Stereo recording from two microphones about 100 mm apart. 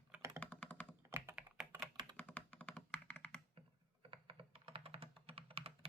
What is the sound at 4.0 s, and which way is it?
Computer keyboard, 65° right (ahead or behind).